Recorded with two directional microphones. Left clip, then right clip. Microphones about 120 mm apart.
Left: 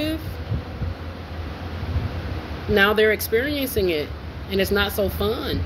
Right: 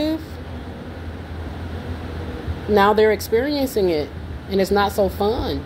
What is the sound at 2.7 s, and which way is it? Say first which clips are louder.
A woman's voice: right 2 dB; 45° right (ahead or behind).